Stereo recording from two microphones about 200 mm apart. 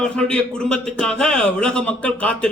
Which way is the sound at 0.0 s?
5° left (ahead or behind).